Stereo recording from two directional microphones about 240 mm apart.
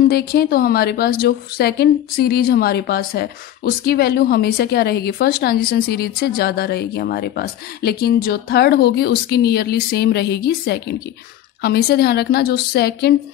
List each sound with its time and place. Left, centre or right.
0.1 s a woman's voice: left